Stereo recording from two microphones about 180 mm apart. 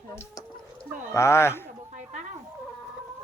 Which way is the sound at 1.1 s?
15° left (ahead or behind).